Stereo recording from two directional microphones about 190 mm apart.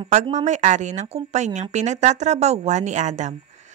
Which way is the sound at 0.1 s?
35° right (ahead or behind).